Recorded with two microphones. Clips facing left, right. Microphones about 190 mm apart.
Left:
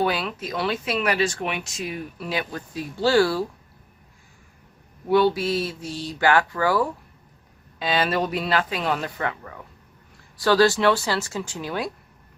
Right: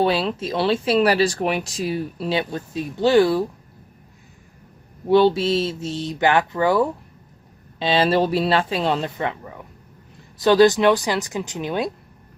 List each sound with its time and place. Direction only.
0.0 s speech: 30° right (ahead or behind)
5.0 s speech: 25° right (ahead or behind)